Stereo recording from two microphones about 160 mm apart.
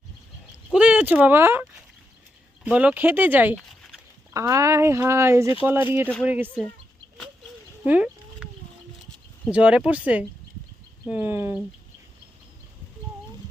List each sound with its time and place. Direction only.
0.7 s speech: 10° right (ahead or behind)
2.6 s speech: 10° right (ahead or behind)
7.9 s a sound: 10° right (ahead or behind)
9.5 s speech: 5° right (ahead or behind)